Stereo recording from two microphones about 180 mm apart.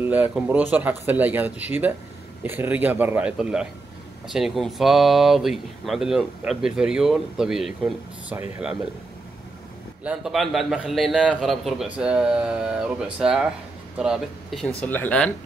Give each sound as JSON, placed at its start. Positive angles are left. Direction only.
{"t": 0.0, "sound": "speech", "side_deg": -10}
{"t": 10.0, "sound": "speech", "side_deg": 0}
{"t": 14.8, "sound": "speech", "side_deg": 10}